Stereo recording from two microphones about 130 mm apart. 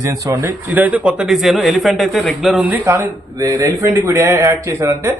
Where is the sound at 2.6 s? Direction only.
15° right (ahead or behind).